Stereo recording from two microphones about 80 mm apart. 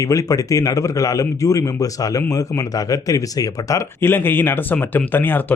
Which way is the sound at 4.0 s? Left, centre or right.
Left.